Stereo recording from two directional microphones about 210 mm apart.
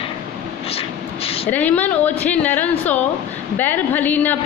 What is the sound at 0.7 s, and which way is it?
Vehicle, 25° left (ahead or behind).